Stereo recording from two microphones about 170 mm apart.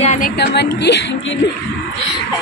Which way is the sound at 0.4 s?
80° left.